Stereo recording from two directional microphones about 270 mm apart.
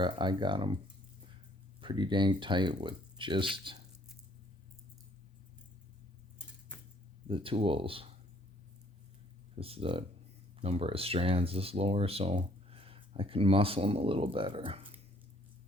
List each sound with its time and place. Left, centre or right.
0.0 s speech: centre
1.8 s speech: centre
7.3 s speech: centre
9.6 s speech: right